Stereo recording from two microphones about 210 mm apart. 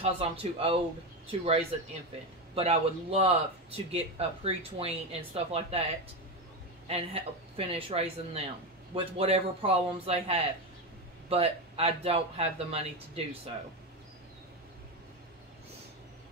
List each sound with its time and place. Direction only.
0.0 s speech: 25° right (ahead or behind)
2.5 s speech: 30° right (ahead or behind)
6.9 s speech: 30° right (ahead or behind)